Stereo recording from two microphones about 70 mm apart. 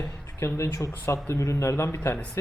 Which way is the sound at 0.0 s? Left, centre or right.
Left.